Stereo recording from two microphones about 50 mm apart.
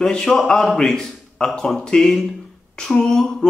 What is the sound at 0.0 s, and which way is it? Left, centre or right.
Speech, centre.